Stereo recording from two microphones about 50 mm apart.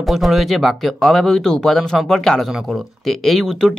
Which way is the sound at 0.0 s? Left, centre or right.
Centre.